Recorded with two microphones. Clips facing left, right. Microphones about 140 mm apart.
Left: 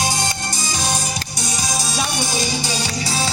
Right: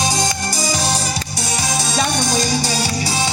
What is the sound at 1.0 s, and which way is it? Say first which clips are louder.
Music: right 3 dB; 30° right (ahead or behind).